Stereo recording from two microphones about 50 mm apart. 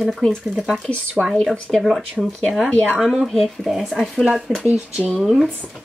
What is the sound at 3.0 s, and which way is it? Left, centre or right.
Speech, centre.